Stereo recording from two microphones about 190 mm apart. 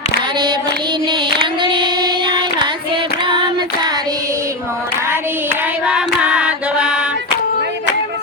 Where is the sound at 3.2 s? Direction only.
25° right (ahead or behind); by 7.1 s 5° right (ahead or behind).